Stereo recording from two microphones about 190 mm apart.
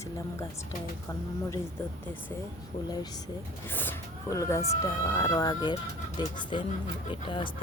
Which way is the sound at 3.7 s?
10° left (ahead or behind).